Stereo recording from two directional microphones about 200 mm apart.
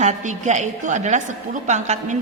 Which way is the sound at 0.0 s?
35° right (ahead or behind).